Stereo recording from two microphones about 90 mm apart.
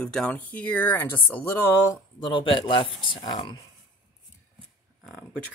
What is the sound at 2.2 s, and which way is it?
Speech, 65° left (ahead or behind).